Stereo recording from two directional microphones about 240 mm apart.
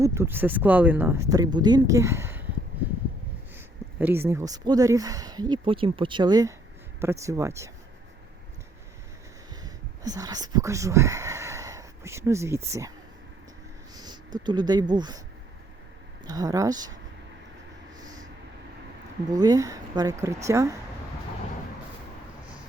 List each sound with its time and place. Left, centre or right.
0.0 s speech: centre
3.5 s speech: centre
9.6 s speech: centre
13.9 s a sound: centre
14.3 s speech: centre
16.2 s speech: centre
17.9 s vehicle: centre
19.3 s speech: centre